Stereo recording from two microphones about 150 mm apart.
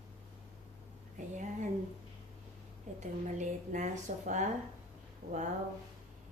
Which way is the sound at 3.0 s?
55° right (ahead or behind).